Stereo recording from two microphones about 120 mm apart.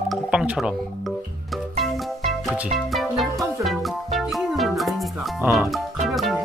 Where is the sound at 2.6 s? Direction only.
5° right (ahead or behind).